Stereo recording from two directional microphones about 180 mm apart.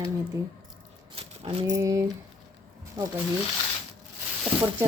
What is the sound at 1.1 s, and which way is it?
Speech, 30° right (ahead or behind).